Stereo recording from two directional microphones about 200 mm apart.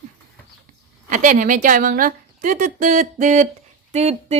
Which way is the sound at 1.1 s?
40° right (ahead or behind).